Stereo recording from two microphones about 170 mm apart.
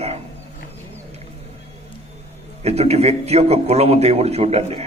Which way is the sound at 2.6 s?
40° right (ahead or behind).